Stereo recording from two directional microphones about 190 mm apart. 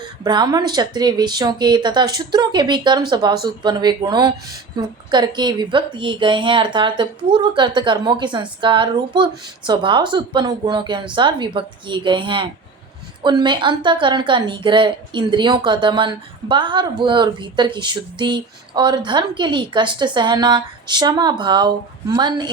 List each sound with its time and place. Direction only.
0.3 s a woman's voice: 20° right (ahead or behind)